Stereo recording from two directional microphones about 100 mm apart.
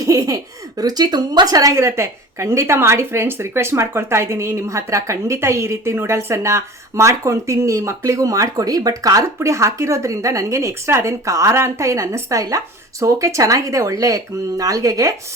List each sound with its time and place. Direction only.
0.0 s a woman's voice: 35° right (ahead or behind)